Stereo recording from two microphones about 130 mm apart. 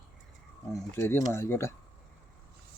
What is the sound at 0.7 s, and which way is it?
Speech, 20° left (ahead or behind).